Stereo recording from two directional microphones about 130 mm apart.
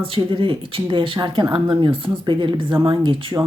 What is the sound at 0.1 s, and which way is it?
Speech, 40° right (ahead or behind).